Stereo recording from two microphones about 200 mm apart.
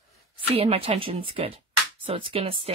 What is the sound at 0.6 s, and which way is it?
Speech, 30° right (ahead or behind).